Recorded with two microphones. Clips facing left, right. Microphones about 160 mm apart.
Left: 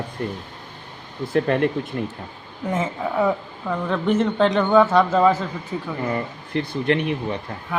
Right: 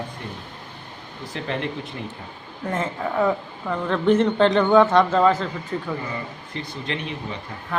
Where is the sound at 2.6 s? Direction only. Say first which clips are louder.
Left 2 dB; 5° left (ahead or behind).